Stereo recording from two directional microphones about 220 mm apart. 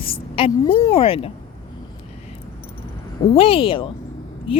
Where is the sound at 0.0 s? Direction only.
25° left (ahead or behind).